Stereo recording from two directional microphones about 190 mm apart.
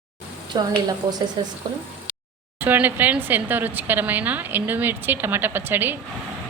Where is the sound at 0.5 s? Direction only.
25° right (ahead or behind).